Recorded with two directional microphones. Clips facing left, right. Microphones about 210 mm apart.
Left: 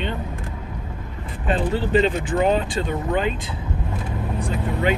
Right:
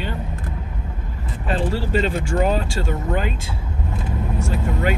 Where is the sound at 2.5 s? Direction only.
45° right (ahead or behind).